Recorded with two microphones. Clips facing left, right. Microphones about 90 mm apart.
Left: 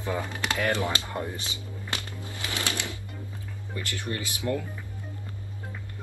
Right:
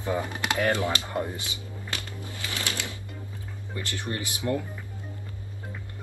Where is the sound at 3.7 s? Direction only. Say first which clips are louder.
Even; 20° right (ahead or behind).